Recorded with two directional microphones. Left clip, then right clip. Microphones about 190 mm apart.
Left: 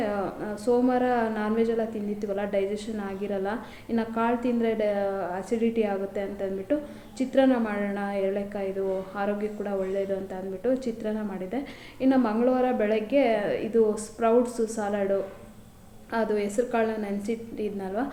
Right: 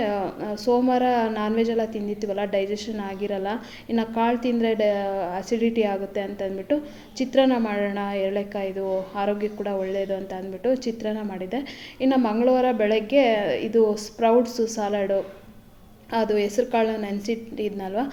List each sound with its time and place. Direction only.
0.0 s a sound: 35° right (ahead or behind)
0.7 s a woman's voice: 35° right (ahead or behind)
16.1 s a woman's voice: 35° right (ahead or behind)